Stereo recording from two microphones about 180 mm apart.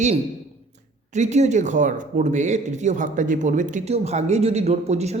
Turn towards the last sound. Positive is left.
turn(degrees=-35)  # may be behind; listen again after turning